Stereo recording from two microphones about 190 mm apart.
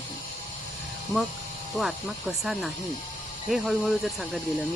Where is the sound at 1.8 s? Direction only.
Centre (ahead or behind).